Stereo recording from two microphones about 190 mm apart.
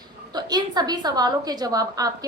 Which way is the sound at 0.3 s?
20° right (ahead or behind).